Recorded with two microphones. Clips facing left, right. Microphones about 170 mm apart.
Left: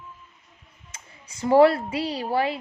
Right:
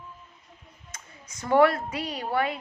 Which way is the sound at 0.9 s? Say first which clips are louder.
Even; 25° left (ahead or behind).